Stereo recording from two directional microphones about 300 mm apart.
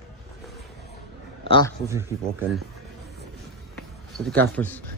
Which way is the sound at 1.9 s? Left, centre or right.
Centre.